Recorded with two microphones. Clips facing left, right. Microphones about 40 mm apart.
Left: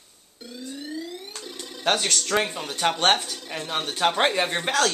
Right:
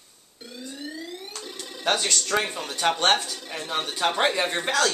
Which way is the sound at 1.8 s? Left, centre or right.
Centre.